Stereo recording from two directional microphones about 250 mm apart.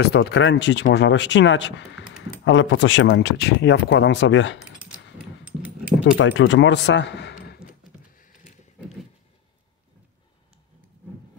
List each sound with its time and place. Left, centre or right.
0.0 s speech: left
5.4 s dog: centre
6.1 s speech: left